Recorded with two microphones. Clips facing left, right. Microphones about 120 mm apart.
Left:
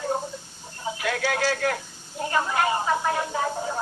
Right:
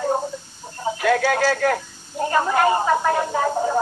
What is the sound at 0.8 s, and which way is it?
Speech, 45° right (ahead or behind).